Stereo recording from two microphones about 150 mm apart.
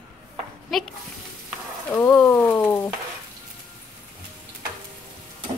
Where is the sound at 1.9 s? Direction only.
5° left (ahead or behind).